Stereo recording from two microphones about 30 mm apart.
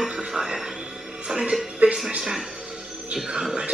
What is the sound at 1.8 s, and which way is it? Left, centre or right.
Music, right.